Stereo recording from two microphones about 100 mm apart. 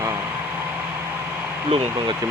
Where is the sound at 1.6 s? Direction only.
65° right (ahead or behind).